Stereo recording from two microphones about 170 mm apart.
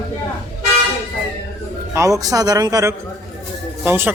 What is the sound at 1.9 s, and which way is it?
A man's voice, 20° right (ahead or behind).